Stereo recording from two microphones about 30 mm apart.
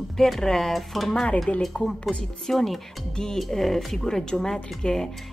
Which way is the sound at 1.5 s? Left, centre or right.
Left.